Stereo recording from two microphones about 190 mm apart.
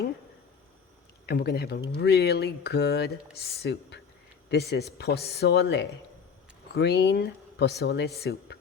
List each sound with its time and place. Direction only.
1.3 s speech: 55° left (ahead or behind)